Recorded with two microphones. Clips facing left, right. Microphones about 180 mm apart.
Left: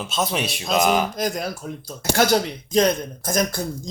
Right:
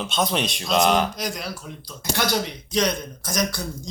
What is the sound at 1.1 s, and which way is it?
Speech, 45° left (ahead or behind).